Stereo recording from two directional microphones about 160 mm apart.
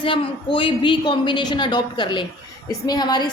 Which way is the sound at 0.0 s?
35° left (ahead or behind).